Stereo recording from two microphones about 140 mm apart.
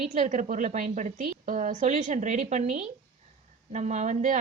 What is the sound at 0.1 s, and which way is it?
A woman's voice, 60° right (ahead or behind).